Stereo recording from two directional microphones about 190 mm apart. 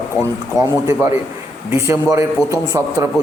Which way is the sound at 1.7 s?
15° right (ahead or behind).